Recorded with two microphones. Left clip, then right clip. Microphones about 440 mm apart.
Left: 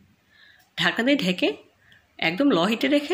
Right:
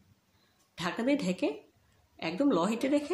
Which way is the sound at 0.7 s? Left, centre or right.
Left.